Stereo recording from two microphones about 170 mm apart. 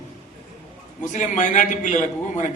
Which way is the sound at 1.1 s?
45° left (ahead or behind).